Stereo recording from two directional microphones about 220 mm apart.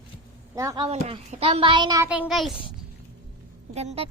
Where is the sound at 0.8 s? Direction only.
25° right (ahead or behind); by 2.2 s 10° right (ahead or behind).